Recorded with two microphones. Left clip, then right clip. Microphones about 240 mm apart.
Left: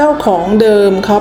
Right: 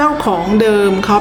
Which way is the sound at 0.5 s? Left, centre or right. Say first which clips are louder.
Left 3 dB; centre.